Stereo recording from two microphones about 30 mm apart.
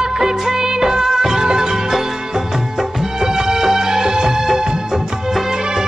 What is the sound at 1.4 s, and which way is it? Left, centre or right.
Music, right.